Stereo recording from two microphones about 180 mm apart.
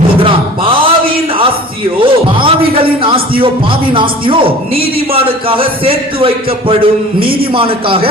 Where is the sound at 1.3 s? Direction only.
30° right (ahead or behind).